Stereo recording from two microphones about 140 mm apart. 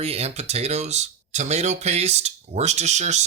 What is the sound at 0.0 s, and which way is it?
Speech, 45° right (ahead or behind).